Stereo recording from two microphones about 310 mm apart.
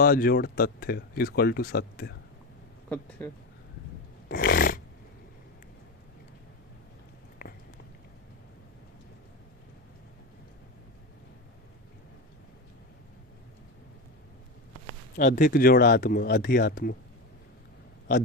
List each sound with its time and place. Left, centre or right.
0.0 s speech: left
3.2 s speech: centre
4.3 s dog: left
7.4 s a sound: left
15.1 s speech: left